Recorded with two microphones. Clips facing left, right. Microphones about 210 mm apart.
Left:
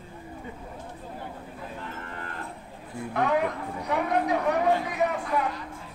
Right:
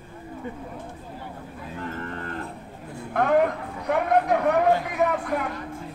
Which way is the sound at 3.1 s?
55° right (ahead or behind).